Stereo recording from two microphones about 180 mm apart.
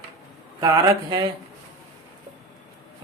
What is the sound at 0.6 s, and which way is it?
Speech, 20° right (ahead or behind).